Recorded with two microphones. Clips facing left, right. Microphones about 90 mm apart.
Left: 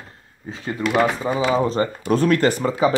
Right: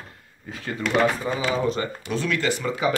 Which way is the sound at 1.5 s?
35° left (ahead or behind).